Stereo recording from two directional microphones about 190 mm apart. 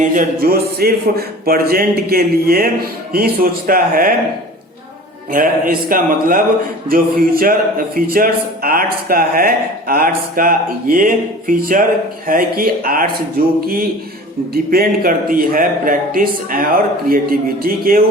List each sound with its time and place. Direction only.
0.0 s speech: 45° right (ahead or behind)
5.3 s speech: 45° right (ahead or behind)